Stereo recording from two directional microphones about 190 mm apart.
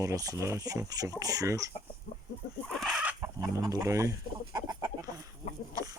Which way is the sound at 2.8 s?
5° right (ahead or behind).